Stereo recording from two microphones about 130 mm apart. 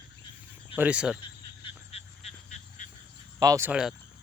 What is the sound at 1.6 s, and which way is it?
Frog, 50° left (ahead or behind).